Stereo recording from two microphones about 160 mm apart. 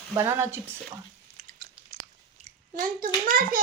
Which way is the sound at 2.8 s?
60° right (ahead or behind).